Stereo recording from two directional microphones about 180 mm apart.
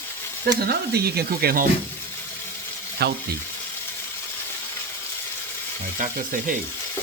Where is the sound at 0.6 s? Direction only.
60° right (ahead or behind).